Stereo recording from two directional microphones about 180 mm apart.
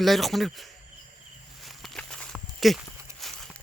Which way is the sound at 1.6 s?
Centre (ahead or behind).